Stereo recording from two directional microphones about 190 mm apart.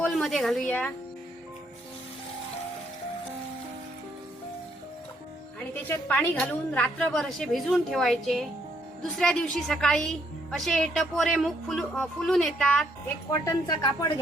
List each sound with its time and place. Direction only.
0.0 s a sound: centre (ahead or behind)
0.7 s speech: 10° left (ahead or behind)
5.5 s a woman's voice: 10° left (ahead or behind)
13.3 s speech: 20° left (ahead or behind)